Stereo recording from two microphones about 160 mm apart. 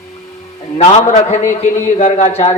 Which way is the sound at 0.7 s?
45° left (ahead or behind).